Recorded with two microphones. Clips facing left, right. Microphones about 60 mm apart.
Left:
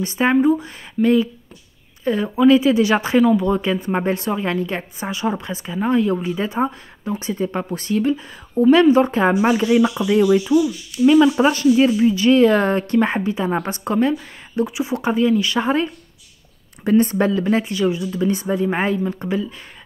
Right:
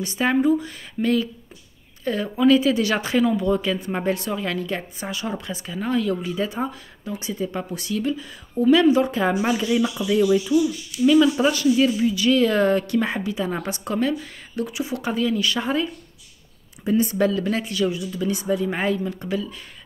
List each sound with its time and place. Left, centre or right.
0.0 s a woman's voice: left
16.8 s a woman's voice: left